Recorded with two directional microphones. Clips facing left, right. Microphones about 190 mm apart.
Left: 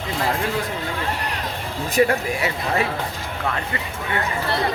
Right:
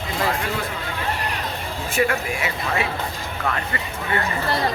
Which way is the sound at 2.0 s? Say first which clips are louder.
Left 3 dB; 35° left (ahead or behind).